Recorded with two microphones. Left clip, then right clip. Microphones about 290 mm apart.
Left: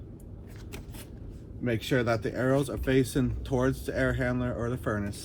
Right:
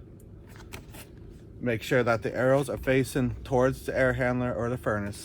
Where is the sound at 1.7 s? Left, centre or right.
Right.